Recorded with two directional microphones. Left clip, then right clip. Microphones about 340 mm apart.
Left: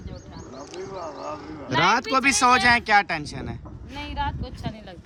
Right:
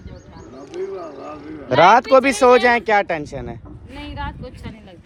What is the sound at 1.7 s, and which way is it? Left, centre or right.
Speech, centre.